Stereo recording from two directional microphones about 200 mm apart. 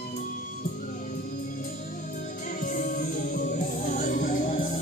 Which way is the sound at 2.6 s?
40° left (ahead or behind).